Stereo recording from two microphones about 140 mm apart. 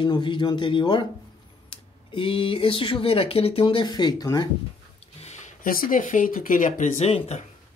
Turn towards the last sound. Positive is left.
turn(degrees=50)  # may be behind; listen again after turning